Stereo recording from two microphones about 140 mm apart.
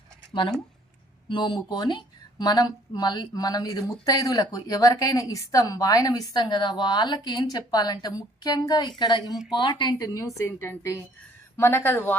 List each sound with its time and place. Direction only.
1.3 s speech: 35° left (ahead or behind); by 12.1 s 15° left (ahead or behind)